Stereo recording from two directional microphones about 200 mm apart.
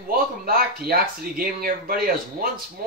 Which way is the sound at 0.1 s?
45° right (ahead or behind).